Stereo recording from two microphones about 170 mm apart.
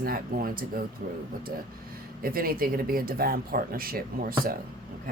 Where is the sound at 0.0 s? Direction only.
60° right (ahead or behind).